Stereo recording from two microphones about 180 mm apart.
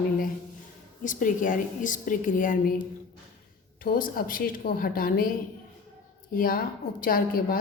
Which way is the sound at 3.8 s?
50° left (ahead or behind).